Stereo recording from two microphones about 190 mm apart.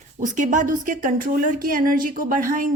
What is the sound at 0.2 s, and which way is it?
Speech, 40° right (ahead or behind).